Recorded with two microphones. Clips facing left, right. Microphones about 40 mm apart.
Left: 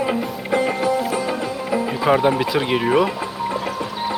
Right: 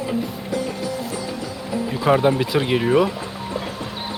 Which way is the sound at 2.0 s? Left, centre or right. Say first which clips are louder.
Even; centre.